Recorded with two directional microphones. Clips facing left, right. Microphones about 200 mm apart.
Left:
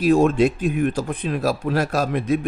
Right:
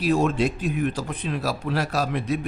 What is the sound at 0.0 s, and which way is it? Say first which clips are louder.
A man's voice: left 5 dB; 50° left (ahead or behind).